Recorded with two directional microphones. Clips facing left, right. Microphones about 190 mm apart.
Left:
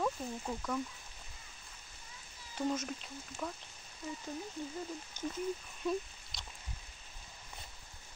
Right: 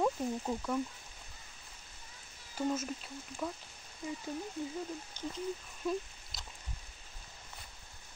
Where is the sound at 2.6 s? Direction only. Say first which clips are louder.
Right 1 dB; 5° right (ahead or behind).